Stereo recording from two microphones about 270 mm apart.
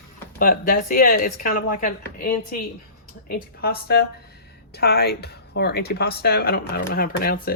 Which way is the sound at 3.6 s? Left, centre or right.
Left.